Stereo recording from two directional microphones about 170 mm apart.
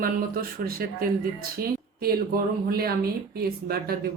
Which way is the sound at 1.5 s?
60° right (ahead or behind).